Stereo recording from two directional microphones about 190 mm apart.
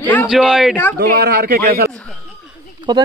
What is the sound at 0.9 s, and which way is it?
Speech, 60° right (ahead or behind).